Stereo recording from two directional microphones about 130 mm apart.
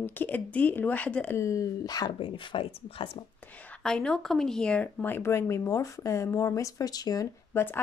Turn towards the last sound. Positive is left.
turn(degrees=15)  # may be behind; listen again after turning